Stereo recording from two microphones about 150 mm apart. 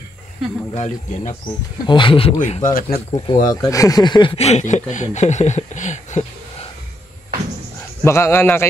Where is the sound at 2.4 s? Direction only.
55° left (ahead or behind).